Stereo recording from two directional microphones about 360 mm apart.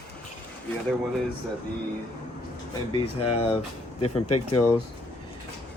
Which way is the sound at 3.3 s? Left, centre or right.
Centre.